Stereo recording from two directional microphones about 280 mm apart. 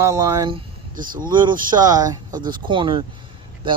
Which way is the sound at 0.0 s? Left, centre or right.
Centre.